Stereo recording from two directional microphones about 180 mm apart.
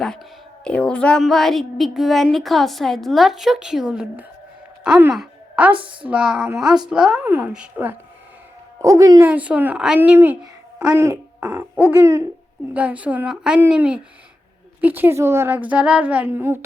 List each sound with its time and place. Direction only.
0.6 s a woman's voice: 5° left (ahead or behind)
5.1 s a sound: 5° right (ahead or behind)
5.7 s a woman's voice: 30° right (ahead or behind)
6.1 s a woman's voice: 5° right (ahead or behind)
8.8 s a woman's voice: 20° right (ahead or behind)